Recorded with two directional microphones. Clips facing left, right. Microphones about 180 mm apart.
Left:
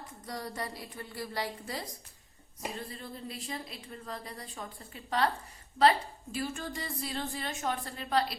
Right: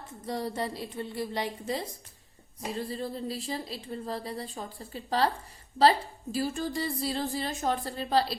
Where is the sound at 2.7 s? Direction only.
35° right (ahead or behind).